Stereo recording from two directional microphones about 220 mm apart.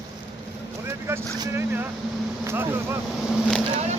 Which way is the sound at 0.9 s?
10° right (ahead or behind).